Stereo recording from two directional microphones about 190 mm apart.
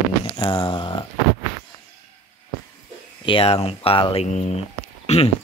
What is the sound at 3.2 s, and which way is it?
Speech, 30° left (ahead or behind).